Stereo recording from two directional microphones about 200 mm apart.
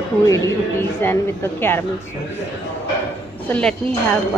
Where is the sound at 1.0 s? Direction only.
10° left (ahead or behind).